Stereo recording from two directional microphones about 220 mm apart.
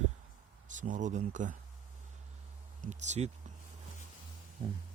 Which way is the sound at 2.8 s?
30° right (ahead or behind).